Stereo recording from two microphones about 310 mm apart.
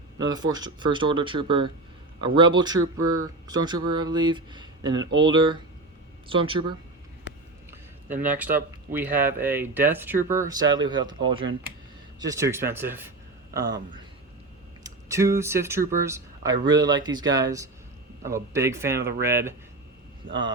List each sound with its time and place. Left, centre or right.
0.2 s speech: centre
7.7 s a man's voice: centre
14.8 s speech: centre
20.2 s speech: right